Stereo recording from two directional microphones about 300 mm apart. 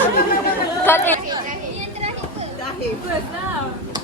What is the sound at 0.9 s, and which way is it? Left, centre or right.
Speech, centre.